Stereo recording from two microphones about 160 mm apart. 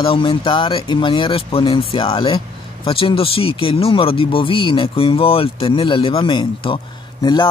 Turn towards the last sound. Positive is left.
turn(degrees=25)  # may be behind; listen again after turning